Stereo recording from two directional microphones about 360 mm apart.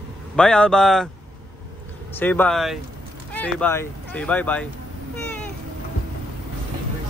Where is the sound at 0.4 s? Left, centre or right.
Centre.